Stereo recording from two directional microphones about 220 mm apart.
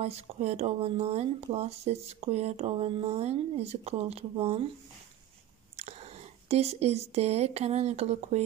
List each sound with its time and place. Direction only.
0.0 s speech: 30° right (ahead or behind)
5.8 s speech: 30° right (ahead or behind)